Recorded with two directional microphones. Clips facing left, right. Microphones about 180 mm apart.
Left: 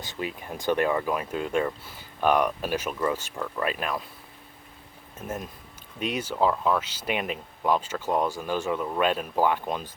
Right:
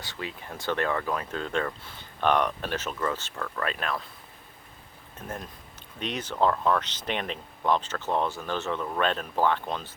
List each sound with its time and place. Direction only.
0.0 s speech: 20° left (ahead or behind)
5.2 s speech: 5° left (ahead or behind)